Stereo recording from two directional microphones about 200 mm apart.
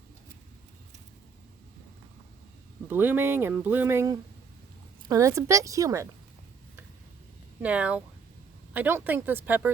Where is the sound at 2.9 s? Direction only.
10° right (ahead or behind).